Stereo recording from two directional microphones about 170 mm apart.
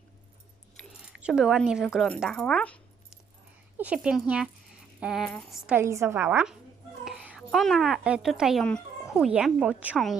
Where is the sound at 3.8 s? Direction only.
5° right (ahead or behind).